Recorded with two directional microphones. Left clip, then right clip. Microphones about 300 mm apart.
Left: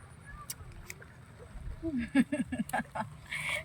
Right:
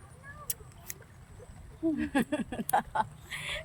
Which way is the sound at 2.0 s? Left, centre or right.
Centre.